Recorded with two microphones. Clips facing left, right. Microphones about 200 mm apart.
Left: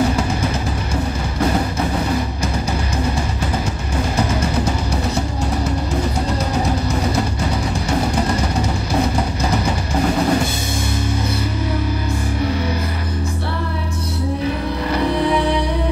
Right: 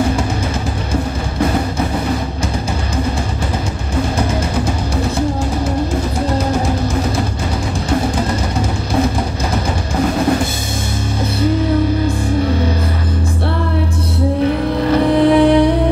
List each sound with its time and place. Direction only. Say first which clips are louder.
14.9 s music: right 7 dB; 55° right (ahead or behind)